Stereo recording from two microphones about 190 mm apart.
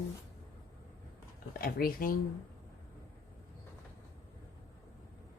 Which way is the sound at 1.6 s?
50° left (ahead or behind).